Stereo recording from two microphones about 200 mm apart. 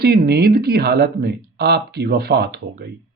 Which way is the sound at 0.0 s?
50° right (ahead or behind).